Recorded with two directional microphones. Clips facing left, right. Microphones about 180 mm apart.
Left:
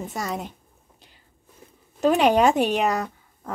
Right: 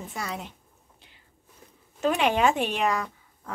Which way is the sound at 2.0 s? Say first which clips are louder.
Left 5 dB; 40° left (ahead or behind).